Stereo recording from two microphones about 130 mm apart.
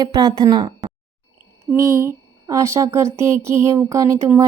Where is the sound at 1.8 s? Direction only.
20° right (ahead or behind).